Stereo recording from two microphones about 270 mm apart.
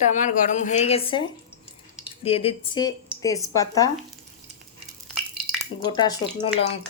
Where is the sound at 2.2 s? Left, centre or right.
Left.